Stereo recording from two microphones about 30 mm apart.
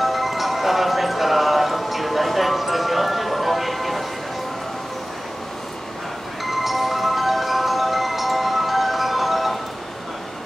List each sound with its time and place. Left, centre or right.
0.0 s music: centre
6.4 s music: centre